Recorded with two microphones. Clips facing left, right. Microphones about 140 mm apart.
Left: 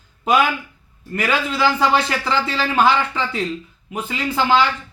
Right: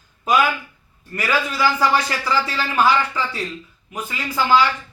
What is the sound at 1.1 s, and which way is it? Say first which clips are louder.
Speech: left 1 dB; 25° left (ahead or behind).